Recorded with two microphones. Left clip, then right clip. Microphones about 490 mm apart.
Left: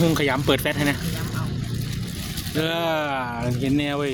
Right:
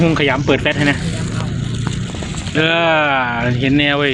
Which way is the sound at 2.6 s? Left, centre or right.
Left.